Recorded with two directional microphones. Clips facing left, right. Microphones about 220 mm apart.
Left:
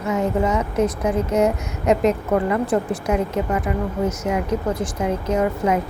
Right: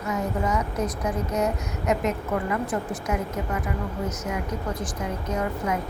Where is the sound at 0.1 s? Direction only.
25° left (ahead or behind).